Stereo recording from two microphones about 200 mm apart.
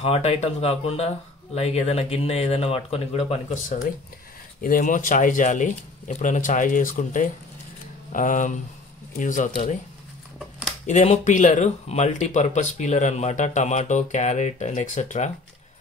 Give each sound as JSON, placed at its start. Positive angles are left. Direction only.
{"t": 0.0, "sound": "speech", "side_deg": 30}
{"t": 4.6, "sound": "speech", "side_deg": 45}
{"t": 10.9, "sound": "speech", "side_deg": 35}